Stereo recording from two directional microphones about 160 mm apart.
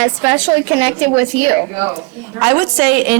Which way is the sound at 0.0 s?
10° right (ahead or behind).